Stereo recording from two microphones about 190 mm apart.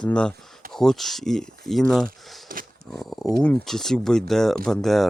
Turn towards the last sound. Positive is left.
turn(degrees=0)  # may be behind; listen again after turning